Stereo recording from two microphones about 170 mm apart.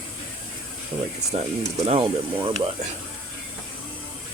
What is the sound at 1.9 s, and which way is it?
Speech, 35° right (ahead or behind).